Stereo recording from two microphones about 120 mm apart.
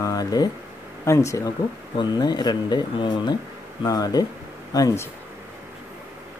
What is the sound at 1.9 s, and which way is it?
Speech, 35° left (ahead or behind).